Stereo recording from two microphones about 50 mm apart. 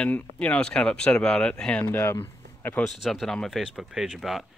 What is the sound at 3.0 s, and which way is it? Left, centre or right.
Speech, centre.